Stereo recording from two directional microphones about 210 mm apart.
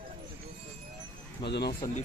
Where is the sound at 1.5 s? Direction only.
50° left (ahead or behind).